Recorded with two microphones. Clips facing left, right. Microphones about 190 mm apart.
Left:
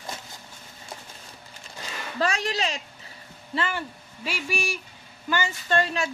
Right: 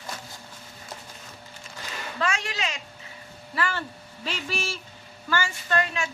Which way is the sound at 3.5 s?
20° left (ahead or behind).